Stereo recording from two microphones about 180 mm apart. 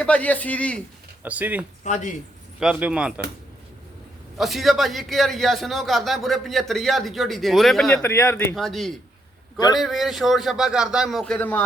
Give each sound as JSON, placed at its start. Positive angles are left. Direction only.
{"t": 0.0, "sound": "speech", "side_deg": 5}
{"t": 1.2, "sound": "speech", "side_deg": -10}
{"t": 1.8, "sound": "speech", "side_deg": 45}
{"t": 2.6, "sound": "a man's voice", "side_deg": -5}
{"t": 4.4, "sound": "a man's voice", "side_deg": 0}
{"t": 7.9, "sound": "speech", "side_deg": 15}
{"t": 8.5, "sound": "a man's voice", "side_deg": 0}